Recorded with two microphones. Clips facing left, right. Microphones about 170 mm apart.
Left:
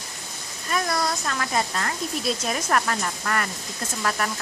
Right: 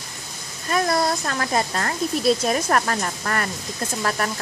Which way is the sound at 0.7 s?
40° right (ahead or behind).